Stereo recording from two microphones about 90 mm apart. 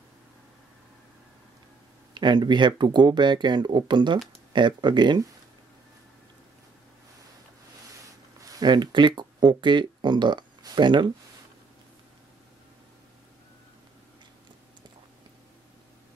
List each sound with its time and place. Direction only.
2.1 s speech: 55° right (ahead or behind)
8.4 s speech: 50° right (ahead or behind)